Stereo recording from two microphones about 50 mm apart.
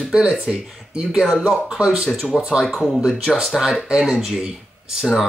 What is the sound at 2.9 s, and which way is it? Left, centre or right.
Speech, centre.